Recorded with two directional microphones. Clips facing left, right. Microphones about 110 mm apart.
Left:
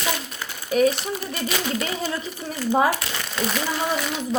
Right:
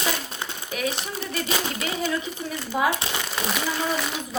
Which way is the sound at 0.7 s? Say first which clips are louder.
Left 10 dB; 40° left (ahead or behind).